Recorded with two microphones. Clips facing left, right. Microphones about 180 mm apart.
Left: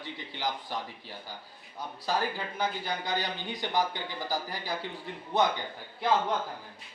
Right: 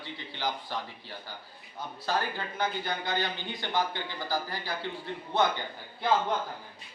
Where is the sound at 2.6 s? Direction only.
10° left (ahead or behind).